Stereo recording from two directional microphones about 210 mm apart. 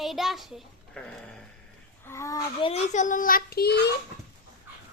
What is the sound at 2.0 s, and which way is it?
A child's voice, 15° left (ahead or behind).